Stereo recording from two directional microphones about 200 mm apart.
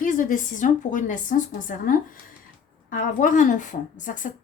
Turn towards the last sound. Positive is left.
turn(degrees=40)  # may be behind; listen again after turning